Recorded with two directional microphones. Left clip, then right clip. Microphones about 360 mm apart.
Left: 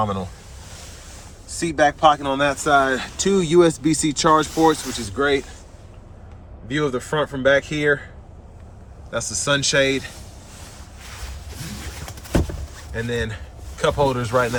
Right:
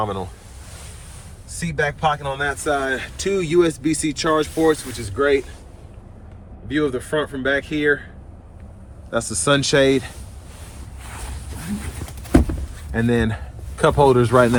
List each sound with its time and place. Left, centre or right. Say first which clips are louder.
0.0 s speech: left 1 dB; centre
1.5 s speech: left 5 dB; centre
6.7 s speech: right 1 dB; centre
9.1 s speech: right 2 dB; centre
12.9 s speech: right 5 dB; centre